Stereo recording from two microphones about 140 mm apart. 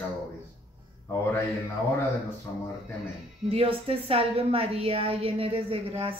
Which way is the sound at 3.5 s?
45° right (ahead or behind).